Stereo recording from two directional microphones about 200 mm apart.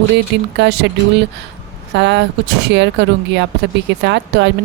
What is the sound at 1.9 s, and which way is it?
Speech, 60° right (ahead or behind).